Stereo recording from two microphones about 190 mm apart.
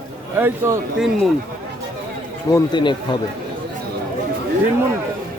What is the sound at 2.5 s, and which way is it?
Speech, 25° left (ahead or behind).